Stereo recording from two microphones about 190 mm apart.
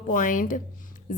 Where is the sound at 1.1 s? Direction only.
45° left (ahead or behind).